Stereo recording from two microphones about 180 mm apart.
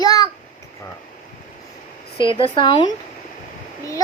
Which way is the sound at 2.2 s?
30° left (ahead or behind).